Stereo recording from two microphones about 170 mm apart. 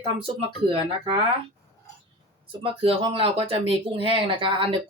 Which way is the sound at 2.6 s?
35° right (ahead or behind).